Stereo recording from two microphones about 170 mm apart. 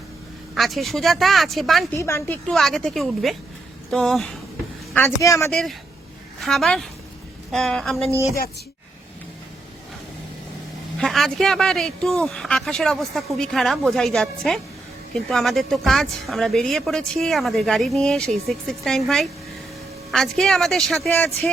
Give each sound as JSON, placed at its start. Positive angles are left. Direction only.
{"t": 0.5, "sound": "speech", "side_deg": 0}
{"t": 2.0, "sound": "speech", "side_deg": 15}
{"t": 4.9, "sound": "speech", "side_deg": 15}
{"t": 5.5, "sound": "speech", "side_deg": 5}
{"t": 10.9, "sound": "speech", "side_deg": 0}